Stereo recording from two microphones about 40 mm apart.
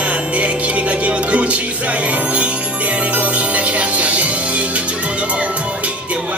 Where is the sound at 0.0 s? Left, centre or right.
Right.